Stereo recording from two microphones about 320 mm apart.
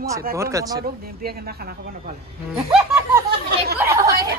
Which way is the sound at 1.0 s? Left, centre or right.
Right.